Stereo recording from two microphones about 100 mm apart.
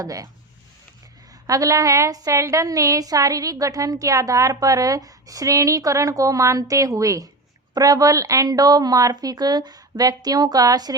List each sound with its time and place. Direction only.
0.0 s a woman's voice: 35° right (ahead or behind)
1.5 s a woman's voice: 35° right (ahead or behind)